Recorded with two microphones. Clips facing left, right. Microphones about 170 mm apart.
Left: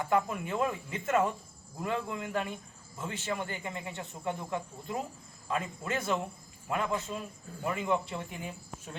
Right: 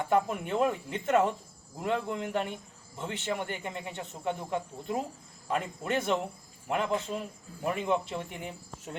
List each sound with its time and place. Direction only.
0.1 s speech: 25° right (ahead or behind)